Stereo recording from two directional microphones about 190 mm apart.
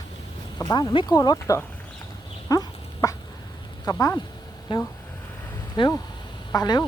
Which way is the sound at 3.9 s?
15° left (ahead or behind).